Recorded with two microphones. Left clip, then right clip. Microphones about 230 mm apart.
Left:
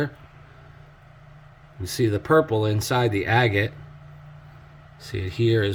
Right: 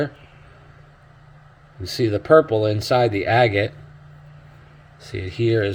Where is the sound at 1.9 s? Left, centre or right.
Left.